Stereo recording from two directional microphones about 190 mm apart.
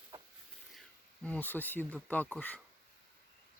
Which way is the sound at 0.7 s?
5° left (ahead or behind).